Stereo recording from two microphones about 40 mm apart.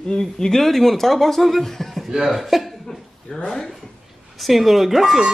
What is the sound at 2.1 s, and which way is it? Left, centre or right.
Speech, centre.